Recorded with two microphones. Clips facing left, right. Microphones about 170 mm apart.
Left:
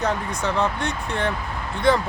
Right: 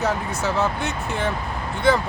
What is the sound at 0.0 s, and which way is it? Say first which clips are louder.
Speech: right 1 dB; 5° right (ahead or behind).